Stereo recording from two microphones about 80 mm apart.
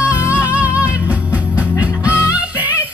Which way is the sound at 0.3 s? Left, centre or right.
Centre.